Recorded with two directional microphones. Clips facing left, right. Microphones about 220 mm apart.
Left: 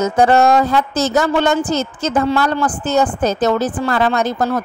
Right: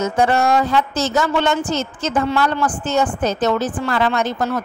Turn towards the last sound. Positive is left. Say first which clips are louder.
# left 3 dB
turn(degrees=40)  # may be behind; listen again after turning